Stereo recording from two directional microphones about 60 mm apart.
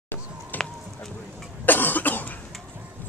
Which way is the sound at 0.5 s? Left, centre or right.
Left.